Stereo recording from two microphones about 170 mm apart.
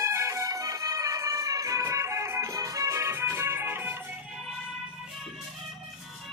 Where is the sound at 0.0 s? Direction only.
15° right (ahead or behind).